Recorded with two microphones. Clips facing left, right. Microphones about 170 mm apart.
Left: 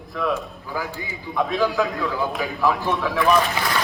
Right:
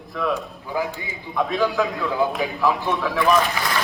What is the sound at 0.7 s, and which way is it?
Speech, 20° right (ahead or behind).